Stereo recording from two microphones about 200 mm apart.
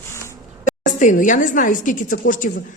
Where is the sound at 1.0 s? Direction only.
40° left (ahead or behind).